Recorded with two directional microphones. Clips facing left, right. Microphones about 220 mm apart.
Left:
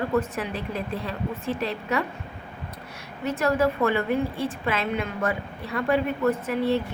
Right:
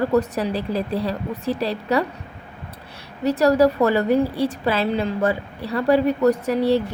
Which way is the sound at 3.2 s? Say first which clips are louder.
Right 7 dB; 35° right (ahead or behind).